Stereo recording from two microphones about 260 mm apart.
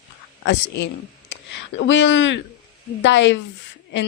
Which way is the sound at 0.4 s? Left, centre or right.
Left.